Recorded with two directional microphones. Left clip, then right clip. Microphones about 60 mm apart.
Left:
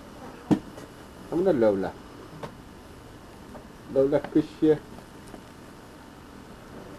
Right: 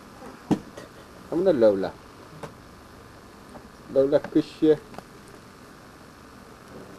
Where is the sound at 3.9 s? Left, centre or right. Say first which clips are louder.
Right 2 dB; centre.